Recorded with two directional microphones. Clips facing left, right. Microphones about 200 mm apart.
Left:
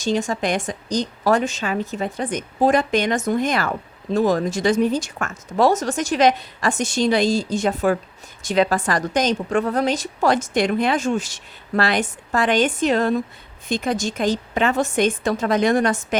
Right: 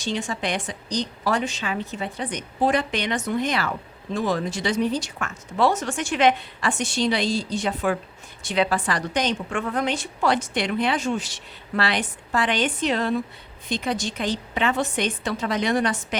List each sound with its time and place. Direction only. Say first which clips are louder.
0.0 s a woman's voice: left 6 dB; 45° left (ahead or behind)